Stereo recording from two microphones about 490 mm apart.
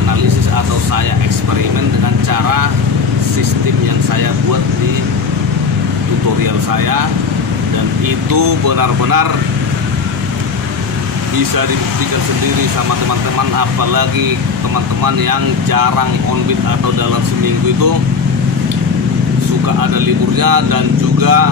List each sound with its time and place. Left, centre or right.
8.3 s speech: right
15.0 s speech: right
19.8 s speech: right